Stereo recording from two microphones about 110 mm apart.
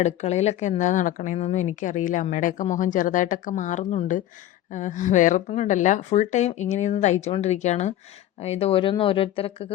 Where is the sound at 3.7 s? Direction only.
90° left.